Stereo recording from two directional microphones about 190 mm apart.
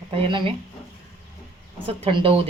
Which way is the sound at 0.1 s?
25° right (ahead or behind).